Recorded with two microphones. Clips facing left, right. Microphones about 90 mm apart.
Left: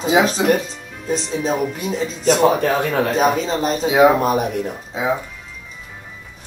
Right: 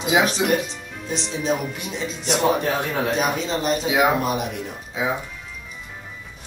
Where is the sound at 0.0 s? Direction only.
35° left (ahead or behind).